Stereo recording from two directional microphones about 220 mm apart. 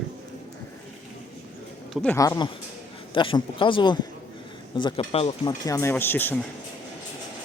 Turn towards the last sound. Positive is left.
turn(degrees=10)  # may be behind; listen again after turning